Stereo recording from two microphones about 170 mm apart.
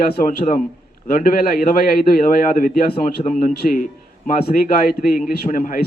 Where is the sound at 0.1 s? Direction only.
55° left (ahead or behind).